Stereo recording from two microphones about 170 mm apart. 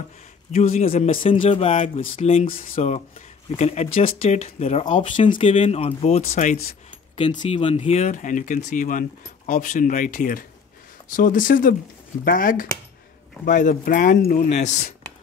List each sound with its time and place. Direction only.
0.5 s speech: 40° left (ahead or behind)
7.2 s speech: 30° left (ahead or behind); by 14.7 s 45° left (ahead or behind)